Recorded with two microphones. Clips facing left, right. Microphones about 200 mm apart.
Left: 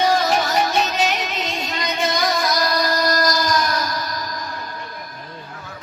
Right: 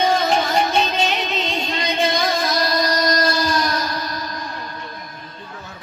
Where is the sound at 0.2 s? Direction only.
25° right (ahead or behind).